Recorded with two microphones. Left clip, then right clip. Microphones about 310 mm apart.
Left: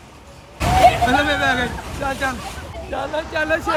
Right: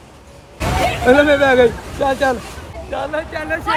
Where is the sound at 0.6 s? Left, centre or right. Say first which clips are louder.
Left 5 dB; centre.